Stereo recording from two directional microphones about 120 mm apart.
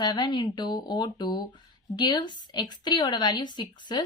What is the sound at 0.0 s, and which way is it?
A woman's voice, 40° left (ahead or behind).